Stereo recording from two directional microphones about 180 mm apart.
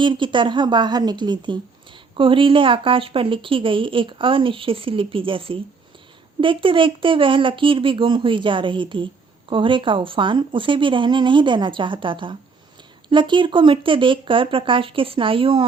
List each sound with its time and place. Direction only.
0.0 s a woman's voice: 25° right (ahead or behind)